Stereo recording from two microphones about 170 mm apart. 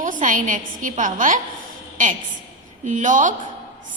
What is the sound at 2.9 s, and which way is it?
Speech, 50° right (ahead or behind).